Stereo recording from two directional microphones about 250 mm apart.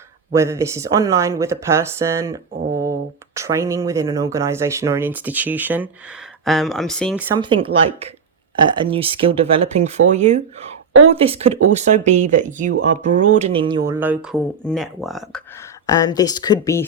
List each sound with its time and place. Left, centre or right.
0.3 s speech: centre
7.3 s speech: centre
15.9 s speech: centre